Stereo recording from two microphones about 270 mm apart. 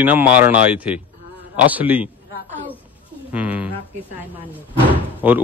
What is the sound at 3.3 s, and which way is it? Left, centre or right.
Speech, centre.